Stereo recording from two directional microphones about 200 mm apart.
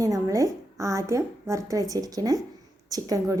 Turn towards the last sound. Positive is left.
turn(degrees=-15)  # may be behind; listen again after turning